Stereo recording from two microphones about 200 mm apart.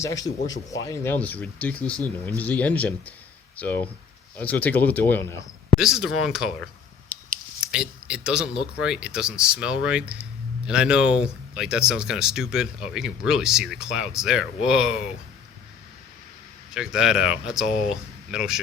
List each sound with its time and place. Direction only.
0.0 s speech: 15° left (ahead or behind)
5.7 s speech: 5° right (ahead or behind)
16.7 s speech: 5° right (ahead or behind)